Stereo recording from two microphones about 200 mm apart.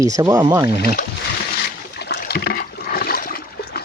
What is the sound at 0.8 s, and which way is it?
Speech, 45° left (ahead or behind).